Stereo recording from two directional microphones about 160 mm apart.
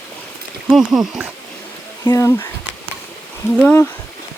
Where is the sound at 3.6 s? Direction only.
10° left (ahead or behind).